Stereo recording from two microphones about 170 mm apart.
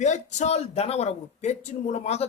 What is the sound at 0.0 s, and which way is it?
Speech, 45° left (ahead or behind).